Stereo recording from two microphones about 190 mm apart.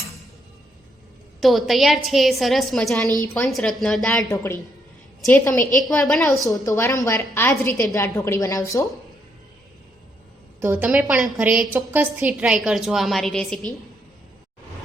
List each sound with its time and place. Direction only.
1.4 s a woman's voice: centre (ahead or behind)
6.7 s a woman's voice: 15° left (ahead or behind)
10.6 s a woman's voice: 10° right (ahead or behind)